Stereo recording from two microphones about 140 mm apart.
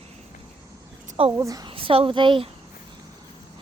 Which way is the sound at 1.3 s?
25° right (ahead or behind).